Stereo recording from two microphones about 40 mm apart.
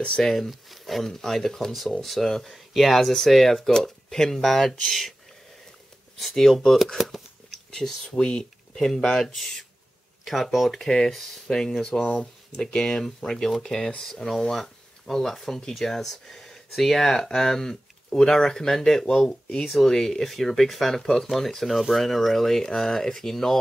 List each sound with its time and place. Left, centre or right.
0.2 s speech: centre
6.1 s speech: centre
8.2 s speech: left; by 10.8 s centre
10.8 s speech: centre